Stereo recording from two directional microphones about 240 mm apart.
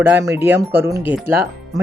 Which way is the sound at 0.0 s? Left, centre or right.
Centre.